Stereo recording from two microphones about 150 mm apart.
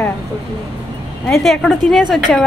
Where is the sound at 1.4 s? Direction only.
Centre (ahead or behind).